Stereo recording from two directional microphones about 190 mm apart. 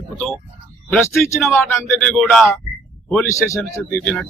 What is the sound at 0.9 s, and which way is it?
Speech, 5° left (ahead or behind).